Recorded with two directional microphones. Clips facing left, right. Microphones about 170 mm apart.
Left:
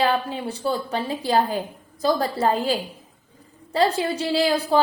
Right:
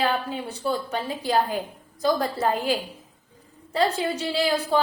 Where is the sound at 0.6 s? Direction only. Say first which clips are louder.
Left 2 dB; 35° left (ahead or behind).